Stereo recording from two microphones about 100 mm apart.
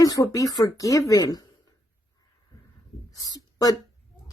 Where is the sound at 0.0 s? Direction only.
35° left (ahead or behind).